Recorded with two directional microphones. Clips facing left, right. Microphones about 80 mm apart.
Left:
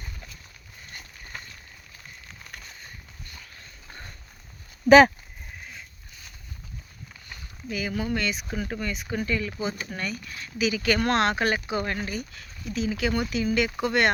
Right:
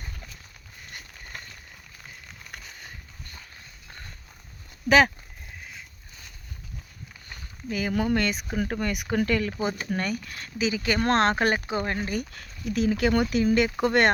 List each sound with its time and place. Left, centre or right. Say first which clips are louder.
4.9 s speech: left 5 dB; left
7.7 s speech: right 3 dB; right
8.9 s speech: right 4 dB; right
10.6 s speech: left 1 dB; right
11.1 s speech: right 2 dB; right
12.1 s speech: right 3 dB; right